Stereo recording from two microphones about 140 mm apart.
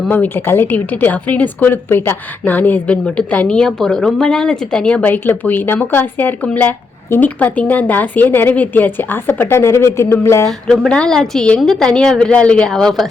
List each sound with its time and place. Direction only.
0.1 s a woman's voice: 15° left (ahead or behind)
10.4 s a woman's voice: 5° left (ahead or behind)